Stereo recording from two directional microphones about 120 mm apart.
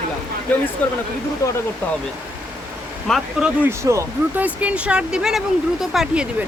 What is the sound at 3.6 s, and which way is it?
Speech, 25° right (ahead or behind).